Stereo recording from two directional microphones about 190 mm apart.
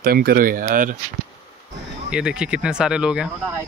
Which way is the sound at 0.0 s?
55° right (ahead or behind).